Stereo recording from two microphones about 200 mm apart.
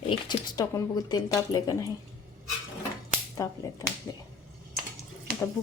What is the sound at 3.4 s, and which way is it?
Stir, 15° left (ahead or behind).